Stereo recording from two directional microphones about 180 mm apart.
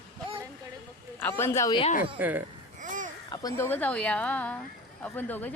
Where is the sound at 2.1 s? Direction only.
10° right (ahead or behind).